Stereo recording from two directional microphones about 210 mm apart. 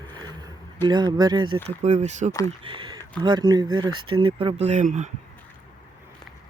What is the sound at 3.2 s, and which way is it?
Speech, 20° right (ahead or behind).